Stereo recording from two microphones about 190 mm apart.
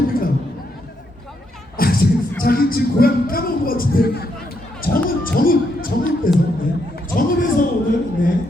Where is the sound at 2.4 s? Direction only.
50° left (ahead or behind).